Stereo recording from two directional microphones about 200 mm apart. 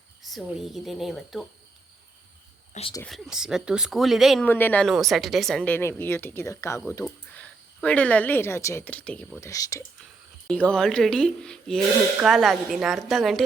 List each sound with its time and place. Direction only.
0.2 s speech: centre (ahead or behind)
2.7 s speech: 35° left (ahead or behind)
3.1 s speech: 5° right (ahead or behind)
4.4 s speech: 10° left (ahead or behind)
10.4 s speech: 5° left (ahead or behind)